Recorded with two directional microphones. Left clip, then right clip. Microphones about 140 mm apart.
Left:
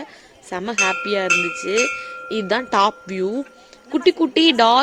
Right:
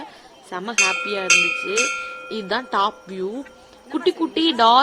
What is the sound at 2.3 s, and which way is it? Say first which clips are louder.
A woman's voice: left 4 dB; 45° left (ahead or behind).